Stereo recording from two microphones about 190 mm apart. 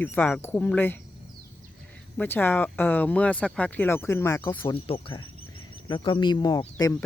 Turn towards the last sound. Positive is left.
turn(degrees=20)  # may be behind; listen again after turning